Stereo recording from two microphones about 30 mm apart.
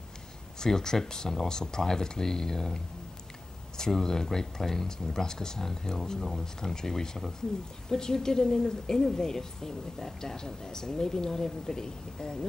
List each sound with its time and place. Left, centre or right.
0.6 s speech: left